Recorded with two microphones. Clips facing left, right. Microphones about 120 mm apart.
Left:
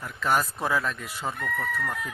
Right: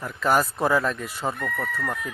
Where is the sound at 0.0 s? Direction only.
Centre (ahead or behind).